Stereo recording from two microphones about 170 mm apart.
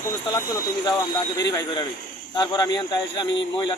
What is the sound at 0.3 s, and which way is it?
A man's voice, 25° left (ahead or behind).